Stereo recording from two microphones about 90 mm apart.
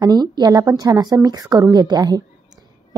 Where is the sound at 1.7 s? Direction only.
50° right (ahead or behind).